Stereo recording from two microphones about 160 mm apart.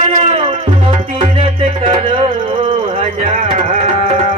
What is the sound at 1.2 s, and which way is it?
Music, 40° right (ahead or behind).